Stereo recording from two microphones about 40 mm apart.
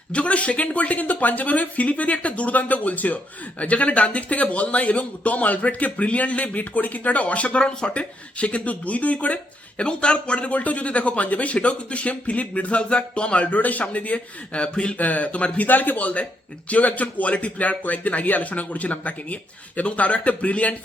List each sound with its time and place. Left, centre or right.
0.1 s speech: left
10.5 s speech: left
14.9 s speech: left
15.6 s a man's voice: left